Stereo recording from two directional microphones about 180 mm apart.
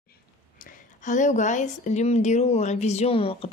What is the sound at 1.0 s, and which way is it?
A woman's voice, 45° left (ahead or behind).